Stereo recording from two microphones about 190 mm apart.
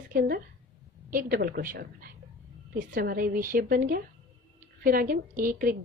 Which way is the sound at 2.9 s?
50° right (ahead or behind).